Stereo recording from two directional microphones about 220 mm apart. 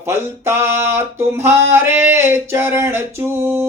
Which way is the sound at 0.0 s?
10° right (ahead or behind).